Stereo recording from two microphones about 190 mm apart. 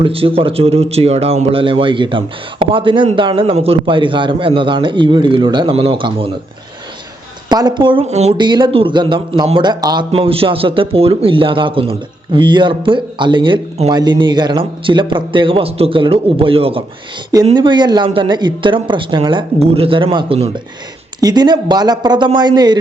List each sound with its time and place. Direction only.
0.0 s speech: 30° right (ahead or behind)
7.5 s speech: 25° right (ahead or behind)
8.4 s speech: 25° right (ahead or behind)